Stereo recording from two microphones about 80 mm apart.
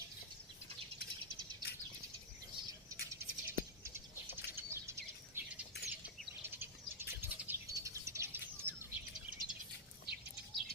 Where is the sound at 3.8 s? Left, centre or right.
Right.